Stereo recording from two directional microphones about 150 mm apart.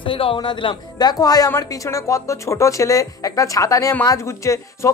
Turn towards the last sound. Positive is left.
turn(degrees=20)  # may be behind; listen again after turning